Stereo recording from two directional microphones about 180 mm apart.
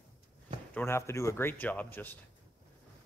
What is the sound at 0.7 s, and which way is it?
Speech, 15° left (ahead or behind).